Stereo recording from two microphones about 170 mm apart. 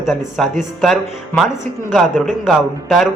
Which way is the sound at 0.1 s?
Centre (ahead or behind).